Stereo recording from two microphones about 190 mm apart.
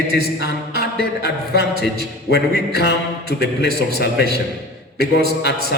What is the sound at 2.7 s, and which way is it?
A man's voice, 60° left (ahead or behind).